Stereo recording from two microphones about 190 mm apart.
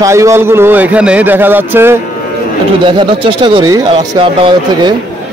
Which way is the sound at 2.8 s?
25° right (ahead or behind).